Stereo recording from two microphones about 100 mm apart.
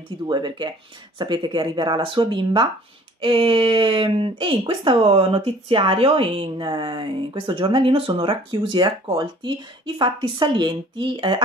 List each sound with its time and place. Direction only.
0.3 s speech: 50° right (ahead or behind)
6.6 s speech: 45° right (ahead or behind)